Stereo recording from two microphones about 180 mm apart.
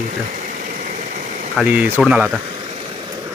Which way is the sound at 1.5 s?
10° right (ahead or behind).